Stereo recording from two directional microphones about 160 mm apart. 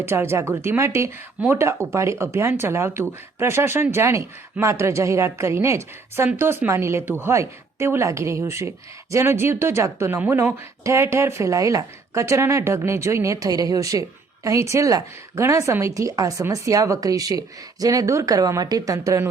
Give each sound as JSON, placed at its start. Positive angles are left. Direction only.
{"t": 0.0, "sound": "a woman's voice", "side_deg": -15}